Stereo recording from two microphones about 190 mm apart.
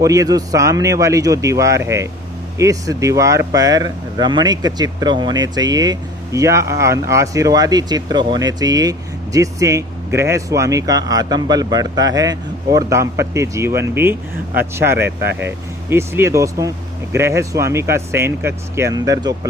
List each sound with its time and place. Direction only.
0.0 s speech: 15° right (ahead or behind)